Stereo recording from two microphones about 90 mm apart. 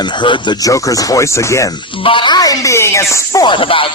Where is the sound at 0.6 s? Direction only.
40° left (ahead or behind).